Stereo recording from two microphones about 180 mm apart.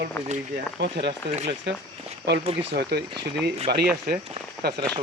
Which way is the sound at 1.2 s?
70° right (ahead or behind).